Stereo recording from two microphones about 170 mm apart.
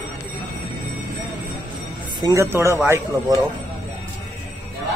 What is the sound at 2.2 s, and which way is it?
Speech, 15° right (ahead or behind).